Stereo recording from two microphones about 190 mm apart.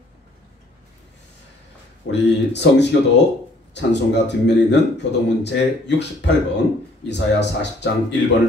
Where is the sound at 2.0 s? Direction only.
65° left (ahead or behind).